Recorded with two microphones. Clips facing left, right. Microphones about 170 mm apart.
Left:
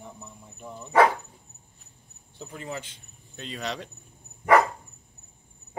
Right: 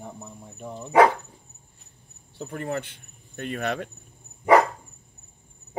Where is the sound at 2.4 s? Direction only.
60° right (ahead or behind).